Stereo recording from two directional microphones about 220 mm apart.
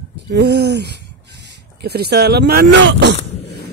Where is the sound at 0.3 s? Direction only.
50° right (ahead or behind).